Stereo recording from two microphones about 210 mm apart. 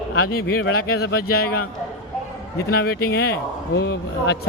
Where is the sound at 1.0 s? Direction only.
45° left (ahead or behind).